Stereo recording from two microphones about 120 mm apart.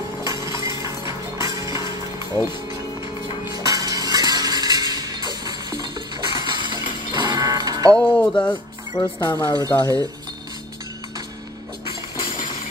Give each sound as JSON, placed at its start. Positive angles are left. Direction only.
{"t": 0.2, "sound": "music", "side_deg": -30}
{"t": 8.0, "sound": "speech", "side_deg": 10}
{"t": 9.0, "sound": "speech", "side_deg": 35}